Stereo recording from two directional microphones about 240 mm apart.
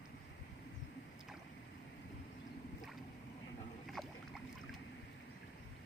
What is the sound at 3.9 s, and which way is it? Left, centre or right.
Boat, centre.